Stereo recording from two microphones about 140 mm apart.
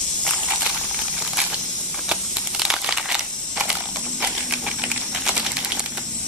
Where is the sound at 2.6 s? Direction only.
5° right (ahead or behind).